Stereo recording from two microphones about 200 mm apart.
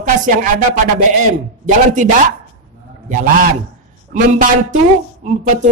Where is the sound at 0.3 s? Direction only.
40° right (ahead or behind).